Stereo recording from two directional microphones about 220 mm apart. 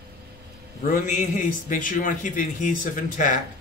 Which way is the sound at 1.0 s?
35° left (ahead or behind).